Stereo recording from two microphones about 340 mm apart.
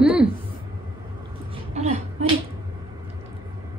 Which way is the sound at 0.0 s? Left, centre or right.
Centre.